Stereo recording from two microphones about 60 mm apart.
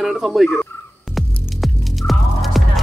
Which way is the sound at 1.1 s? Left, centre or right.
Centre.